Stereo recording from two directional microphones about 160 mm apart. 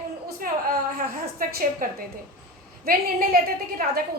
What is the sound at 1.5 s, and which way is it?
Speech, 65° right (ahead or behind).